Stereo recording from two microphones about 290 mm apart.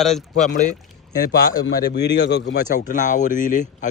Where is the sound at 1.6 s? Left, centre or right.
Left.